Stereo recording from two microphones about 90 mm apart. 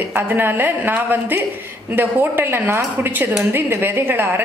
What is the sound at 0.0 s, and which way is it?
A woman's voice, 20° right (ahead or behind).